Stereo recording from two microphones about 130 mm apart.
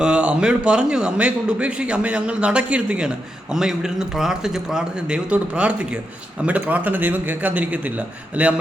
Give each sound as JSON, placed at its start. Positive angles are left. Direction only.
{"t": 0.0, "sound": "a man's voice", "side_deg": -10}